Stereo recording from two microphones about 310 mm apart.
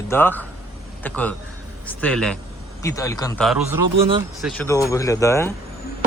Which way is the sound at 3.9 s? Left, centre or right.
Centre.